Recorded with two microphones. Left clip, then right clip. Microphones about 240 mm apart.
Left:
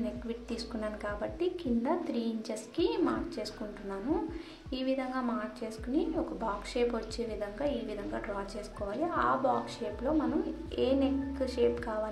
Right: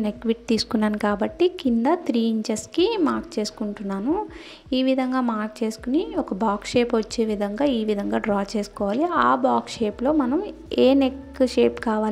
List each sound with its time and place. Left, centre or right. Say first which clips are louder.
0.3 s a woman's voice: right 15 dB; right
10.7 s a woman's voice: right 12 dB; right